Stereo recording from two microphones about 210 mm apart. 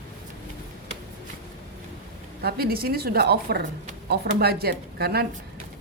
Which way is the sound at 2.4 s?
50° right (ahead or behind).